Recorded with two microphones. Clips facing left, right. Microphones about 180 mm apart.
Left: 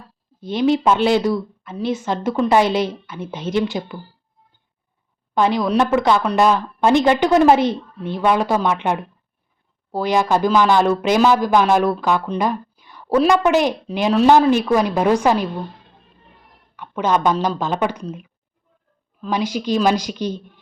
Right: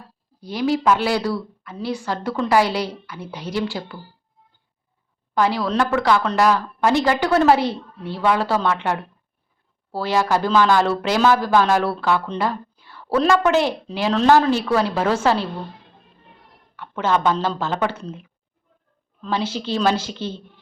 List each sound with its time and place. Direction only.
0.3 s a woman's voice: 25° left (ahead or behind)
5.3 s a woman's voice: 20° left (ahead or behind)
16.7 s speech: 15° left (ahead or behind)
19.2 s speech: 15° left (ahead or behind)